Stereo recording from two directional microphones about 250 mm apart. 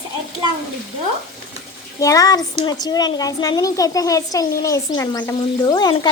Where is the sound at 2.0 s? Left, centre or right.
Centre.